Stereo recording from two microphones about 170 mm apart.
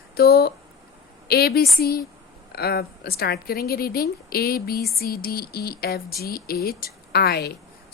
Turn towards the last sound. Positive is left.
turn(degrees=70)  # may be behind; listen again after turning